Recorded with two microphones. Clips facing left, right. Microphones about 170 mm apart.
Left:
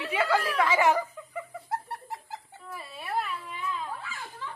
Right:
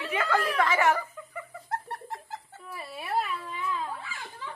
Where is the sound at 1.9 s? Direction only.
10° left (ahead or behind).